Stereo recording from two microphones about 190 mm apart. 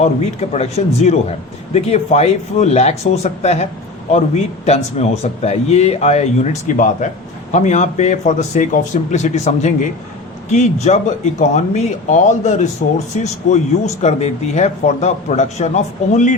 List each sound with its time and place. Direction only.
0.0 s speech: 35° left (ahead or behind)